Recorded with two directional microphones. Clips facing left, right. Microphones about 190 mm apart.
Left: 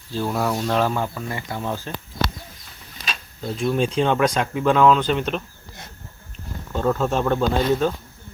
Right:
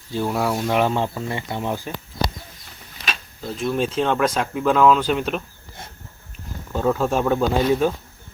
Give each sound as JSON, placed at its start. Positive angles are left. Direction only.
{"t": 0.1, "sound": "speech", "side_deg": -10}
{"t": 3.4, "sound": "speech", "side_deg": 0}
{"t": 6.7, "sound": "speech", "side_deg": -5}